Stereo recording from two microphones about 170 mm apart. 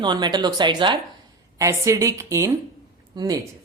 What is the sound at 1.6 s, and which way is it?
A woman's voice, 15° right (ahead or behind).